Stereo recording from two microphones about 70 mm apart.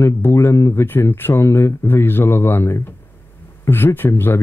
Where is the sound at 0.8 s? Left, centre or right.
Left.